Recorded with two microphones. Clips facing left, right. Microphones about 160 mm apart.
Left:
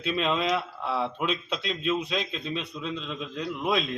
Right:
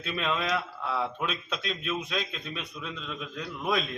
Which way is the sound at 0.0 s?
20° left (ahead or behind).